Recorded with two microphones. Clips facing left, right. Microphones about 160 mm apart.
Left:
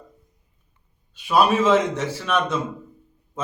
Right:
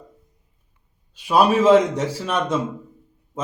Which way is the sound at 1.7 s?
10° right (ahead or behind).